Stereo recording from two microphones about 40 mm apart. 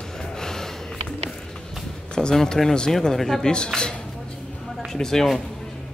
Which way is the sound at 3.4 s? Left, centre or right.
Centre.